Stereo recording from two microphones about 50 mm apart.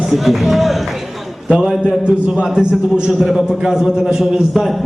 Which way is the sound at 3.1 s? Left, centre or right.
Centre.